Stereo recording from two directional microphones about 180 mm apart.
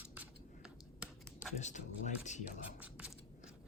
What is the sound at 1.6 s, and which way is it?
Speech, 40° left (ahead or behind).